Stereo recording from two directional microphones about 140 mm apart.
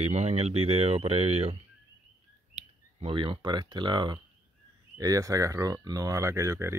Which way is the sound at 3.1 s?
35° right (ahead or behind).